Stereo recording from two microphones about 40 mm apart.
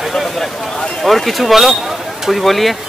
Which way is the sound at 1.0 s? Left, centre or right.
Centre.